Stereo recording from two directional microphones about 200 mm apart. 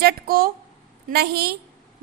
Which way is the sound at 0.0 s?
50° right (ahead or behind).